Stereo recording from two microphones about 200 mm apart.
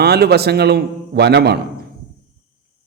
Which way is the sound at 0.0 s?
55° right (ahead or behind).